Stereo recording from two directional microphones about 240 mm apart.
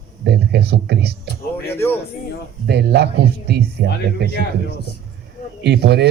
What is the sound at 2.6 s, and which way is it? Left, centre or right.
Speech, right.